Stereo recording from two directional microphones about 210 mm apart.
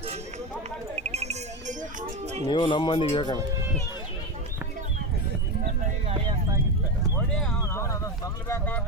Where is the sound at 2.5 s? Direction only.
25° left (ahead or behind).